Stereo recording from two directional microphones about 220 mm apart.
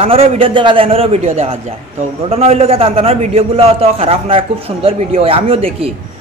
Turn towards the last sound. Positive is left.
turn(degrees=-25)  # may be behind; listen again after turning